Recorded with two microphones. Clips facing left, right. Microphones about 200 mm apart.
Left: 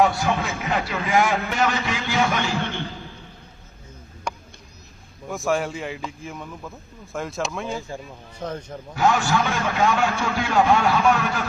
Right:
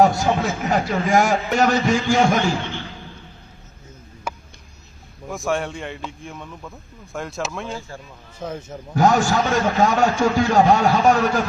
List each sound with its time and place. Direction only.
0.0 s a sound: 45° right (ahead or behind)
0.4 s a man's voice: 45° right (ahead or behind)
4.3 s a sound: 5° right (ahead or behind)
5.3 s a man's voice: centre (ahead or behind)
7.8 s a man's voice: 15° left (ahead or behind)
8.4 s speech: 5° right (ahead or behind)
9.0 s a man's voice: 40° right (ahead or behind)